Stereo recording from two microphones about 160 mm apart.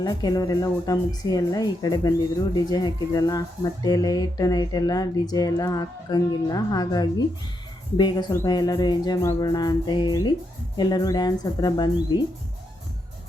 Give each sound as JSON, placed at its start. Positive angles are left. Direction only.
{"t": 0.0, "sound": "speech", "side_deg": 25}